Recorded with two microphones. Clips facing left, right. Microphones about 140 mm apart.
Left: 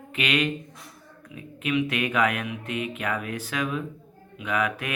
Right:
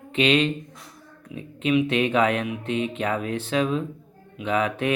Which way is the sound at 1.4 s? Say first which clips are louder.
Right 4 dB; 25° right (ahead or behind).